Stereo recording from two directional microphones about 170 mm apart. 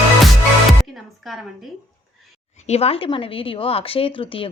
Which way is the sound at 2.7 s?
35° left (ahead or behind).